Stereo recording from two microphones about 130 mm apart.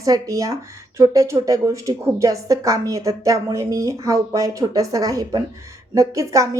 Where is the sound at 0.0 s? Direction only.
25° right (ahead or behind).